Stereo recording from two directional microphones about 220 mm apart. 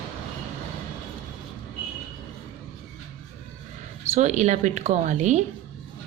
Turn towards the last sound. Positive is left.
turn(degrees=-30)  # may be behind; listen again after turning